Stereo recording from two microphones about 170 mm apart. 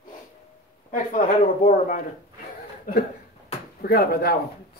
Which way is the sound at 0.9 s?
50° left (ahead or behind).